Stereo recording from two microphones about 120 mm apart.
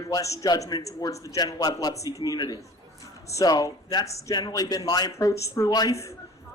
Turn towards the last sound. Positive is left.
turn(degrees=25)  # may be behind; listen again after turning